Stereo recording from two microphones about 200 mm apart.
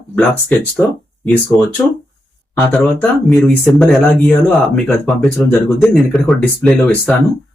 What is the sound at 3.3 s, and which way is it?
Speech, 5° left (ahead or behind).